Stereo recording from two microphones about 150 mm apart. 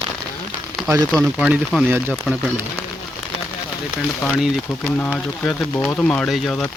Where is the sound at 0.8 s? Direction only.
Centre (ahead or behind).